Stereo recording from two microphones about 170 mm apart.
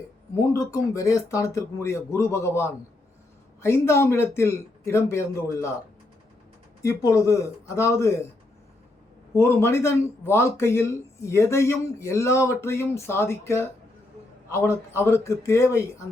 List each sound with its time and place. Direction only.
0.3 s speech: 20° left (ahead or behind)
6.8 s speech: 20° left (ahead or behind)
9.3 s speech: 15° left (ahead or behind)